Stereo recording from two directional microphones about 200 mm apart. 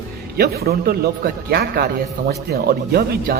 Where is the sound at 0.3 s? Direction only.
50° right (ahead or behind).